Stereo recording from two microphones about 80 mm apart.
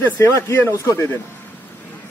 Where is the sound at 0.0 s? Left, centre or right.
Left.